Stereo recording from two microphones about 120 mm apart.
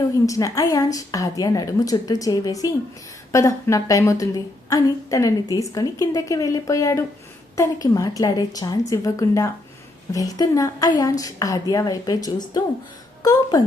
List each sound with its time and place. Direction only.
0.3 s a woman's voice: 30° left (ahead or behind)